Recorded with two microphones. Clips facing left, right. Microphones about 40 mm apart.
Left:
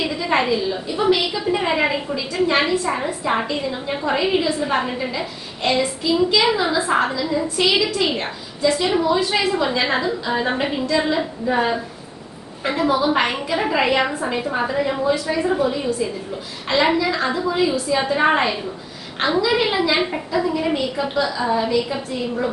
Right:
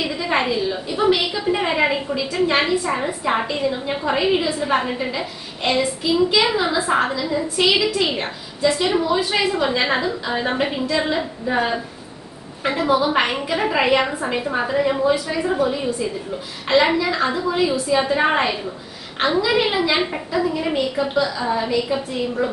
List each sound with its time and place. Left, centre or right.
0.0 s a woman's voice: centre
8.6 s a woman's voice: centre